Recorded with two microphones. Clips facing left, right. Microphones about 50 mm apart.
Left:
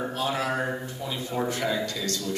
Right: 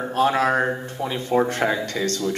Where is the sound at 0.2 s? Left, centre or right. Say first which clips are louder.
Right 10 dB; right.